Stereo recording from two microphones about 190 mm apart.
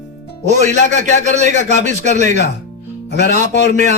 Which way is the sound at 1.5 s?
40° right (ahead or behind).